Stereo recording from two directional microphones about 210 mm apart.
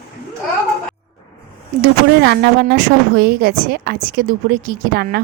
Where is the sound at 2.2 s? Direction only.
50° right (ahead or behind).